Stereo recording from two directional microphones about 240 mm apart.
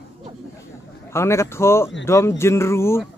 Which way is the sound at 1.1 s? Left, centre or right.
Centre.